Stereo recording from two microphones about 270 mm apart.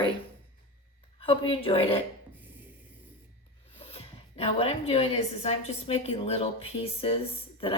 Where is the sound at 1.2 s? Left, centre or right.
Centre.